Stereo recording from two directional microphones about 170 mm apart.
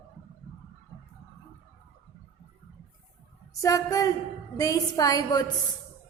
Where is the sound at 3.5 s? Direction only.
20° left (ahead or behind).